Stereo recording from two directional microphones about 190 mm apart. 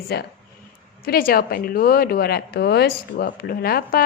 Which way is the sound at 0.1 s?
60° left (ahead or behind).